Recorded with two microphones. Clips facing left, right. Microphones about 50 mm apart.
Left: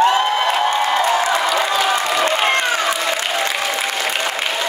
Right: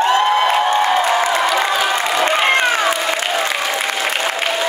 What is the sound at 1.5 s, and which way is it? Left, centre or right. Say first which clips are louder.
Crowd: right 1 dB; centre.